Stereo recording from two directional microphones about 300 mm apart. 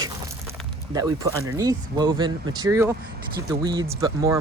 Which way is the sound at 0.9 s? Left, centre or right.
Centre.